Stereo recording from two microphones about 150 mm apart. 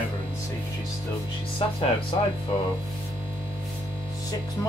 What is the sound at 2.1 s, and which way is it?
Speech, 35° left (ahead or behind).